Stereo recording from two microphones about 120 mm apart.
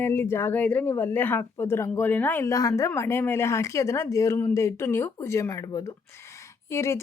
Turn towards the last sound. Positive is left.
turn(degrees=20)  # may be behind; listen again after turning